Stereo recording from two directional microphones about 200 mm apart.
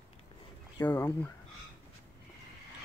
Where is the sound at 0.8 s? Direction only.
10° left (ahead or behind).